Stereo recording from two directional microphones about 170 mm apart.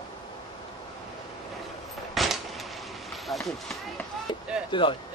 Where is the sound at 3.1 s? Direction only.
Centre (ahead or behind).